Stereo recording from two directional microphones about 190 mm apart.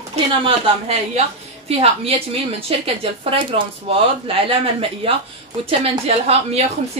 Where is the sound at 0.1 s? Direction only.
30° right (ahead or behind).